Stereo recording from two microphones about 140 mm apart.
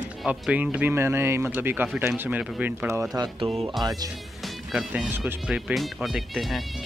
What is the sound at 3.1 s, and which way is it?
Speech, 30° right (ahead or behind).